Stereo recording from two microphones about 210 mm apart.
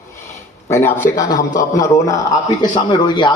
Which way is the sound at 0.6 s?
10° left (ahead or behind).